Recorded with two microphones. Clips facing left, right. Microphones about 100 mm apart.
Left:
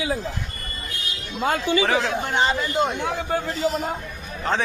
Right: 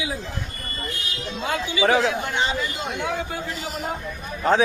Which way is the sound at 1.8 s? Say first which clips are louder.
Right 8 dB; centre (ahead or behind).